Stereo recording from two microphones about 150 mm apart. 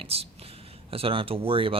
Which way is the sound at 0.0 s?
40° right (ahead or behind).